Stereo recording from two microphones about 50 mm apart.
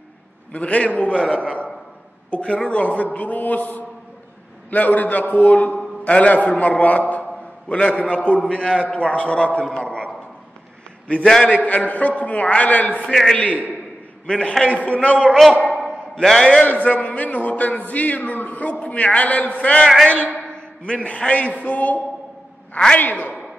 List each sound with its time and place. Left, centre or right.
0.5 s a man's voice: left
11.4 s a man's voice: left
13.0 s a man's voice: centre
13.4 s a man's voice: left
14.2 s a man's voice: centre
14.6 s a man's voice: left
15.5 s a sound: left
15.8 s a sound: centre
16.6 s a man's voice: left